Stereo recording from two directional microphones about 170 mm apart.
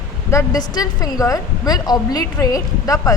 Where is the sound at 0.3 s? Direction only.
20° left (ahead or behind).